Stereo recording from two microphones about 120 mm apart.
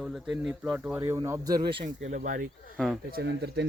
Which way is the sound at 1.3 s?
30° right (ahead or behind).